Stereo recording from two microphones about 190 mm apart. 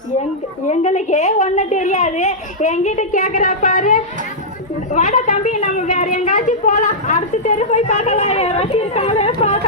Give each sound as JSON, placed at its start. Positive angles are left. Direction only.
{"t": 0.7, "sound": "a woman's voice", "side_deg": 40}